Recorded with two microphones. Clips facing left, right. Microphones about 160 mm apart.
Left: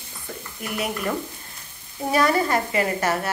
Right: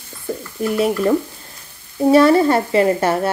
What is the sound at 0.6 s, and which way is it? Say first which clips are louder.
Stir: right 10 dB; 30° right (ahead or behind).